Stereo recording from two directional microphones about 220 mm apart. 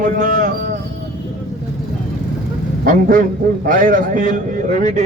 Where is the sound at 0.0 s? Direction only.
35° right (ahead or behind).